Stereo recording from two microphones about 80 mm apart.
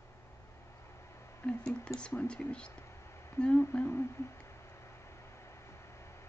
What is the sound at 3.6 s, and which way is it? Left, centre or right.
Speech, left.